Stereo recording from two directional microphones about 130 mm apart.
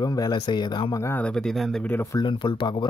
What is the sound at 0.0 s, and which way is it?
Speech, 30° left (ahead or behind).